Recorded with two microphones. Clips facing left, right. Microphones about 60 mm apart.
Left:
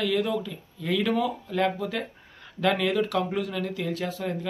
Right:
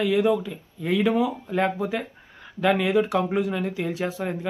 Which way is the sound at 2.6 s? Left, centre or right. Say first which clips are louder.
Right 3 dB; centre.